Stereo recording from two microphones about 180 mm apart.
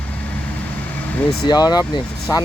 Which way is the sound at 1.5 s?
20° left (ahead or behind).